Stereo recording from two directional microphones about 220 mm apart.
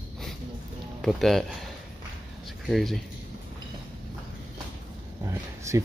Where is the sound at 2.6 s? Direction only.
Centre (ahead or behind).